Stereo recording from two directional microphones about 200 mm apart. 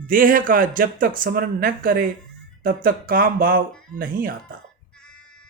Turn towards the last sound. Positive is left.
turn(degrees=-45)  # may be behind; listen again after turning